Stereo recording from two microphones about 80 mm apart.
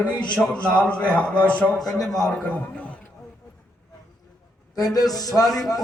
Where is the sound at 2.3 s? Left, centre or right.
Centre.